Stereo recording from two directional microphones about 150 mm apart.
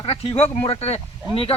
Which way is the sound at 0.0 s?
40° left (ahead or behind).